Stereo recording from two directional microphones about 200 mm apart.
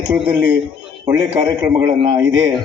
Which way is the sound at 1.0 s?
10° right (ahead or behind).